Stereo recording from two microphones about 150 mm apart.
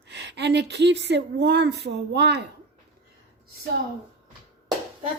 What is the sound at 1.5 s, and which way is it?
Speech, 90° right.